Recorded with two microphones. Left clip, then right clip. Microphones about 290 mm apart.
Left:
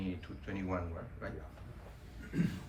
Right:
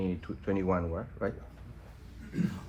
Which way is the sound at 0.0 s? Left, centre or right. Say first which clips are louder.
Right 8 dB; centre.